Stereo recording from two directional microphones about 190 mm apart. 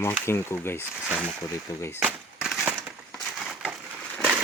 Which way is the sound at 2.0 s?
Centre (ahead or behind).